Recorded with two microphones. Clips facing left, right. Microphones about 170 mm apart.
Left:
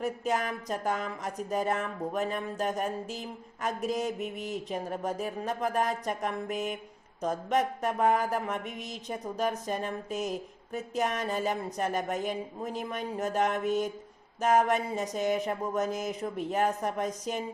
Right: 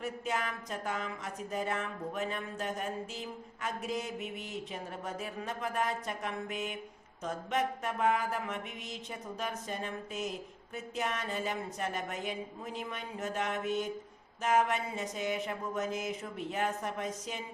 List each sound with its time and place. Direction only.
0.0 s speech: 40° left (ahead or behind)